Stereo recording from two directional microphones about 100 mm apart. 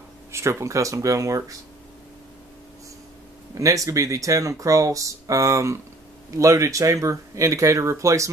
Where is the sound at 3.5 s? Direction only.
35° right (ahead or behind).